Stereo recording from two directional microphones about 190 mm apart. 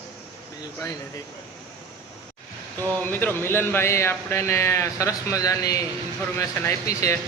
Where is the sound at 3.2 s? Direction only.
10° left (ahead or behind).